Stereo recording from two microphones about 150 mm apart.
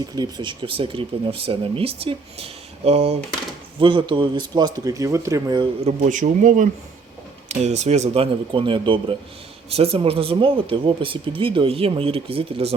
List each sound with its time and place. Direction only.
0.0 s speech: 30° right (ahead or behind); by 3.2 s 45° right (ahead or behind)
3.8 s speech: 35° right (ahead or behind)
5.8 s speech: 55° right (ahead or behind)